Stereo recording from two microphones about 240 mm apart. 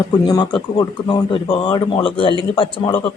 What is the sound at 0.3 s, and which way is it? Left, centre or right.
Speech, centre.